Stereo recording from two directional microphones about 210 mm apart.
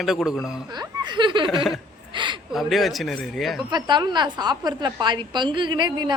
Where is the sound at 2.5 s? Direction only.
Centre (ahead or behind).